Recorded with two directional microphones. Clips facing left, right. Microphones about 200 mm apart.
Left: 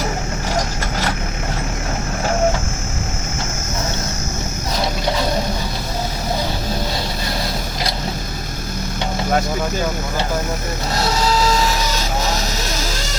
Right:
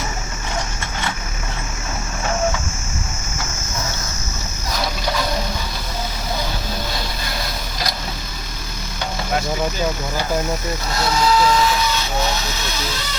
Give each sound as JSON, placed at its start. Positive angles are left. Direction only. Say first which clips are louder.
{"t": 0.5, "sound": "vehicle", "louder": "left 4 dB", "side_deg": 40}
{"t": 10.9, "sound": "printer", "louder": "right 1 dB", "side_deg": 35}
{"t": 12.5, "sound": "a sound", "louder": "left 2 dB", "side_deg": 40}